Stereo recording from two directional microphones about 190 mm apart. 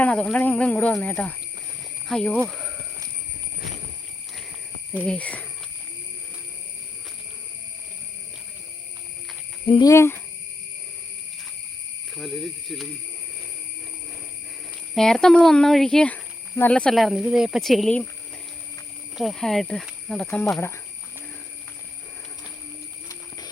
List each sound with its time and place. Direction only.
0.0 s speech: 5° left (ahead or behind)
2.5 s a sound: centre (ahead or behind)
5.0 s speech: 5° left (ahead or behind)
9.6 s speech: 25° left (ahead or behind)
9.9 s speech: 15° left (ahead or behind)
12.1 s speech: centre (ahead or behind)
14.9 s speech: centre (ahead or behind)
19.1 s speech: centre (ahead or behind)